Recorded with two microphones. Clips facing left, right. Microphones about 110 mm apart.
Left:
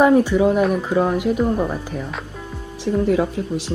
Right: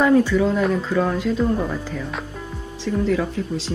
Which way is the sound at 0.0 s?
20° left (ahead or behind).